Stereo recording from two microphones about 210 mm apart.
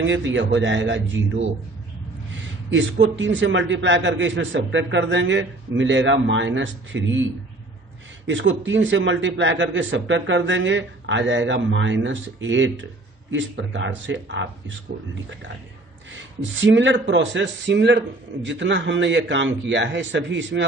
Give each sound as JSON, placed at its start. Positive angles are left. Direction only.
{"t": 0.3, "sound": "a man's voice", "side_deg": -60}
{"t": 2.6, "sound": "a man's voice", "side_deg": -60}
{"t": 8.3, "sound": "a man's voice", "side_deg": -65}
{"t": 16.1, "sound": "a man's voice", "side_deg": -60}